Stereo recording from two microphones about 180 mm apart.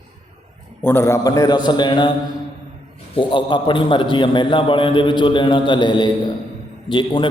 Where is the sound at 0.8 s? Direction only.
10° left (ahead or behind).